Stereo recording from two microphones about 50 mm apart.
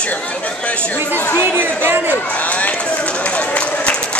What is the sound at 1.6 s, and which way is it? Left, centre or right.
Speech, right.